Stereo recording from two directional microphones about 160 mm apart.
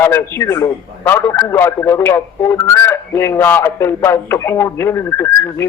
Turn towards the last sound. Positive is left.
turn(degrees=15)  # may be behind; listen again after turning